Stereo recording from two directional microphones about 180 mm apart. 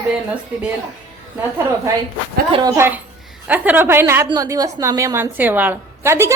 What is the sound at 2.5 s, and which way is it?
A woman's voice, 20° right (ahead or behind).